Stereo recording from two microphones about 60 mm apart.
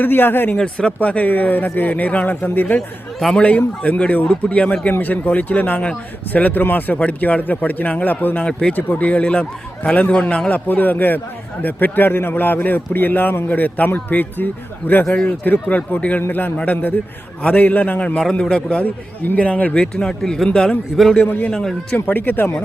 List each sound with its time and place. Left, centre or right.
0.0 s a man's voice: left
0.5 s a man's voice: centre
4.9 s a man's voice: left
10.7 s a man's voice: left
15.4 s a man's voice: left
17.5 s a man's voice: left
20.9 s a man's voice: centre
21.2 s a man's voice: left
21.5 s a man's voice: centre
21.9 s a man's voice: left